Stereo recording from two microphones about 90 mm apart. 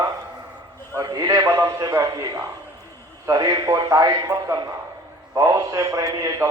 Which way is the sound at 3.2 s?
45° right (ahead or behind).